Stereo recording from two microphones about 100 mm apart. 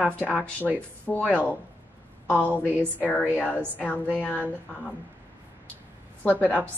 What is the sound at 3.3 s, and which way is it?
Speech, 20° left (ahead or behind).